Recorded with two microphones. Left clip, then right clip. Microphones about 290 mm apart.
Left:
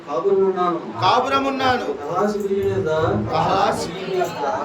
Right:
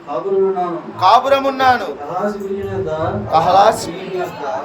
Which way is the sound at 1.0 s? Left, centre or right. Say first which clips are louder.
Right 6 dB; centre.